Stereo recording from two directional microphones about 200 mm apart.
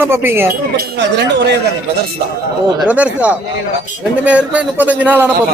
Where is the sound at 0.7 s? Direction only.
55° right (ahead or behind).